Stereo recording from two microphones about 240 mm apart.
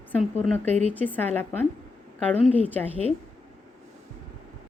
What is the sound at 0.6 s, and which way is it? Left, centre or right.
Speech, right.